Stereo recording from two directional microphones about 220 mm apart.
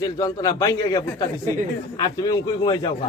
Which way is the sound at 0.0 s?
15° left (ahead or behind).